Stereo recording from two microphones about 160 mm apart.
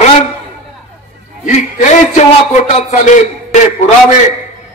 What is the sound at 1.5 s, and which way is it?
A man's voice, 50° left (ahead or behind).